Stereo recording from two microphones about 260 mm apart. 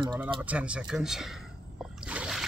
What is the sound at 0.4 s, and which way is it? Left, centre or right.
Speech, centre.